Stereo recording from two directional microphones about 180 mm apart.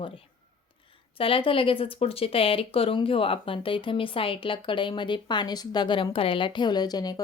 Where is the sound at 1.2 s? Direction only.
30° left (ahead or behind).